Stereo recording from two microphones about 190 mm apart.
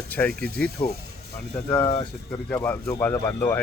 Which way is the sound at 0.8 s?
25° left (ahead or behind).